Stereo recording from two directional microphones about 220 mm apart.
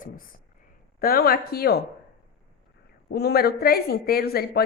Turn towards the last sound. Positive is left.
turn(degrees=45)  # may be behind; listen again after turning